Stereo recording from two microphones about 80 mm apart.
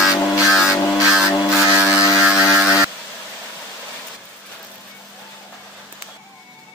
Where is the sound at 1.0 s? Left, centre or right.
Centre.